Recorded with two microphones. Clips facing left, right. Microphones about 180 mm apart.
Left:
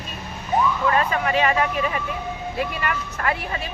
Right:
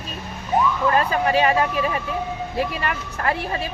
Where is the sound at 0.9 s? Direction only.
30° right (ahead or behind).